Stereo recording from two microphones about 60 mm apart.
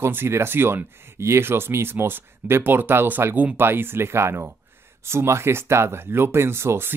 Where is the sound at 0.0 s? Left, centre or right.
Right.